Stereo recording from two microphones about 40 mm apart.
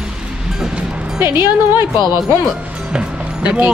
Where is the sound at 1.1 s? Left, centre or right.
Right.